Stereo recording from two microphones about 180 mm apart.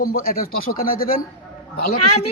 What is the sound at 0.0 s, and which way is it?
Speech, 55° left (ahead or behind).